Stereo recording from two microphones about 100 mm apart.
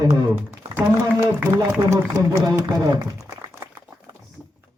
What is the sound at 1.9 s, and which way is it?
Speech, 30° right (ahead or behind).